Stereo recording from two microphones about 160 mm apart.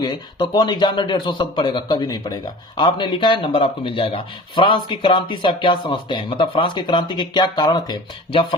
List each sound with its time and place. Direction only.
0.0 s speech: 25° left (ahead or behind)